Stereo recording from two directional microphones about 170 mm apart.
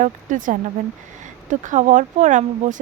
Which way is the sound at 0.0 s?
50° right (ahead or behind).